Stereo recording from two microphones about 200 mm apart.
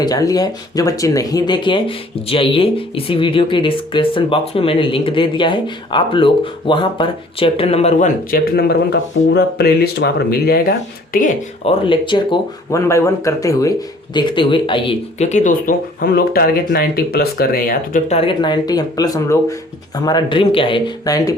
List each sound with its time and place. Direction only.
0.0 s speech: 20° left (ahead or behind); by 11.3 s 45° left (ahead or behind)
11.6 s speech: 25° left (ahead or behind); by 18.0 s 45° left (ahead or behind)
18.1 s speech: 25° left (ahead or behind)